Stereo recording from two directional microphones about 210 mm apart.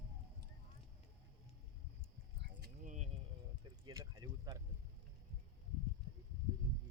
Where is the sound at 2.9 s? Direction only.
35° right (ahead or behind).